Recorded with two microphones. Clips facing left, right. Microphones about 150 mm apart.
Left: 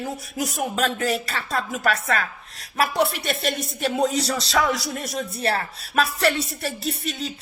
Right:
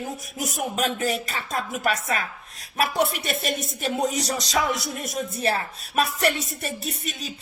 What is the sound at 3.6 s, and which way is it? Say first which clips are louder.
Speech: left 2 dB; 45° right (ahead or behind).